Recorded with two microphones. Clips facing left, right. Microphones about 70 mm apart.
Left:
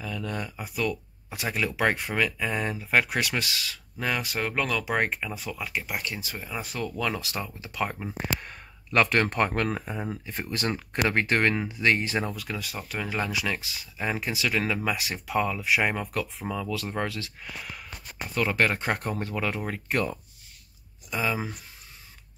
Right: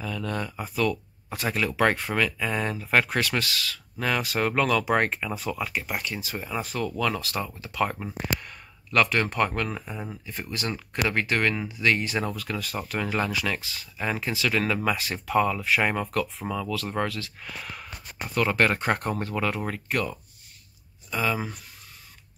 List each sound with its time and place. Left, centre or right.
0.0 s speech: centre
4.0 s speech: centre
6.6 s speech: centre
8.4 s speech: left
12.3 s speech: centre
16.6 s speech: centre
17.6 s a sound: centre
18.3 s speech: centre
19.9 s speech: left
21.1 s speech: centre